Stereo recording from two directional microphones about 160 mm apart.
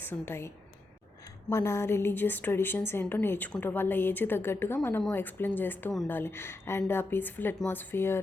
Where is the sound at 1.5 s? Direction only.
20° left (ahead or behind).